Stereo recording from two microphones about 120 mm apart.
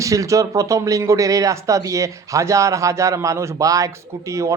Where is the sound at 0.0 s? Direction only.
25° right (ahead or behind).